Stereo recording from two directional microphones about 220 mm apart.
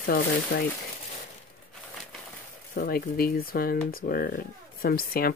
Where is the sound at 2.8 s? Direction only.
45° left (ahead or behind).